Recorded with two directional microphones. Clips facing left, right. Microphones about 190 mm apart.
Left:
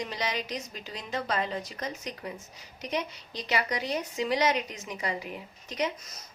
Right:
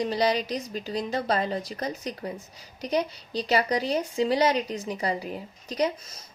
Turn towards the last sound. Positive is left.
turn(degrees=-30)  # may be behind; listen again after turning